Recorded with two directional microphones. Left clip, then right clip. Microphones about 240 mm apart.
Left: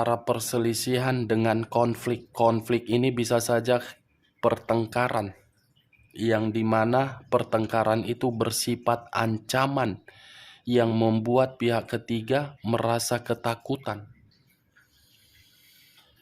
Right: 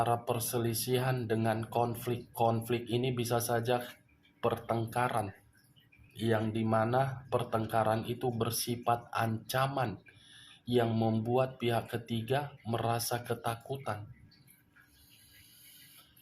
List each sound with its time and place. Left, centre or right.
0.0 s speech: left